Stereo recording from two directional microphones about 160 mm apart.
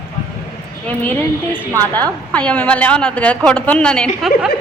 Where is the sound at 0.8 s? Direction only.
10° left (ahead or behind).